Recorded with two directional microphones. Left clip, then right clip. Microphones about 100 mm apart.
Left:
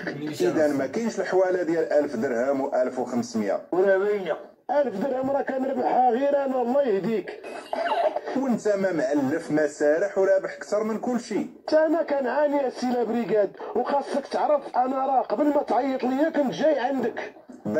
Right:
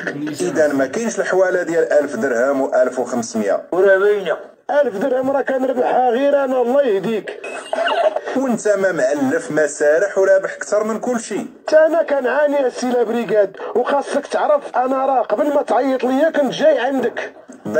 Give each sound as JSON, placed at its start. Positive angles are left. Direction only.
{"t": 0.6, "sound": "speech", "side_deg": -25}